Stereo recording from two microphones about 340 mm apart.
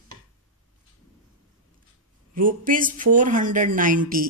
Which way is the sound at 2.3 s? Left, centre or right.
Right.